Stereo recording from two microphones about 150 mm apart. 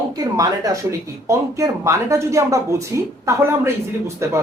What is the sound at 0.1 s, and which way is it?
Speech, 25° right (ahead or behind).